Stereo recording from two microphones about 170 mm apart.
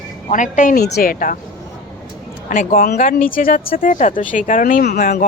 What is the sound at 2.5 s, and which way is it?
Speech, 55° left (ahead or behind).